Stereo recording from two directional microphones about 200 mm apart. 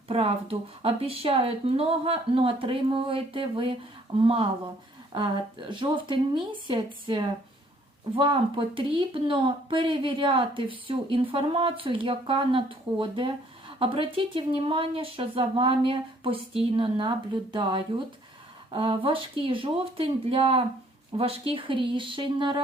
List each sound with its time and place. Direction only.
0.1 s a woman's voice: 30° right (ahead or behind)